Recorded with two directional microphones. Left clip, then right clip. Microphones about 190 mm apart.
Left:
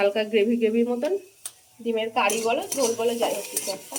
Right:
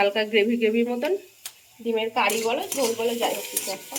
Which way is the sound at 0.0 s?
Centre (ahead or behind).